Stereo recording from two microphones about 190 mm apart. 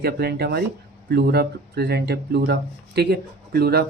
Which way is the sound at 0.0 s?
55° right (ahead or behind).